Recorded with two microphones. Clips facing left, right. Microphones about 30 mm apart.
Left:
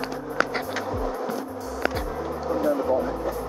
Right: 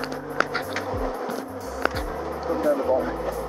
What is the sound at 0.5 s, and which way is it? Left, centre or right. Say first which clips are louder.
Insect: even; centre.